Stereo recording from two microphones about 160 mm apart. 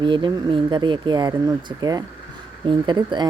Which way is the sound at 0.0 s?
30° right (ahead or behind).